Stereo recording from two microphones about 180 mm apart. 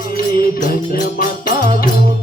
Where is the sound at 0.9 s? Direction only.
50° left (ahead or behind).